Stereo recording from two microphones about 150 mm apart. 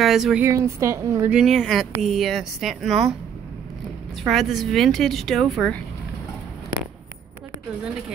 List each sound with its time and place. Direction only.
0.0 s a woman's voice: centre (ahead or behind)
0.4 s a woman's voice: 20° right (ahead or behind)
1.3 s speech: centre (ahead or behind)
4.2 s speech: centre (ahead or behind)